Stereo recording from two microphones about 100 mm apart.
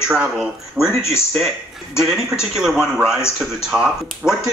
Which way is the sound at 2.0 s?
5° right (ahead or behind).